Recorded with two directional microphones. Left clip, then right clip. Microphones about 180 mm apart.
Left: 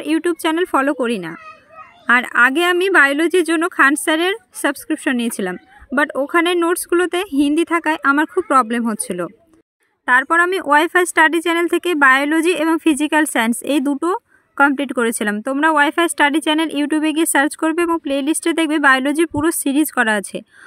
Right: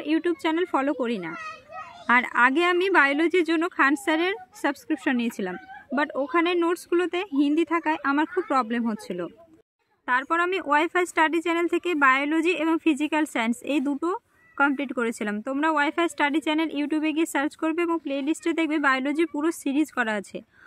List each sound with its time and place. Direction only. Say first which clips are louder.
0.0 s speech: left 6 dB; 30° left (ahead or behind)